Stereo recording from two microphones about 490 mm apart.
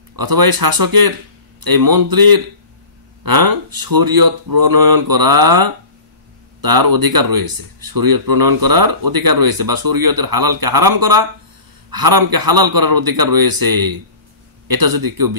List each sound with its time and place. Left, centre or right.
0.1 s speech: right